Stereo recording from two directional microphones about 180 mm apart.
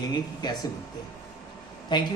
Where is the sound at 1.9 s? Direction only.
25° left (ahead or behind).